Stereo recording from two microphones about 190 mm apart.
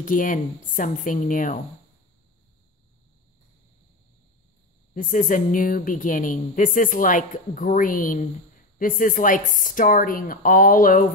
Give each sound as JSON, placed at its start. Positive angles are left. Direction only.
{"t": 0.0, "sound": "speech", "side_deg": 45}
{"t": 4.9, "sound": "speech", "side_deg": 45}